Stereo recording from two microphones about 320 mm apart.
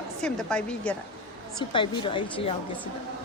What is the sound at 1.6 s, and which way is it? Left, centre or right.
Speech, centre.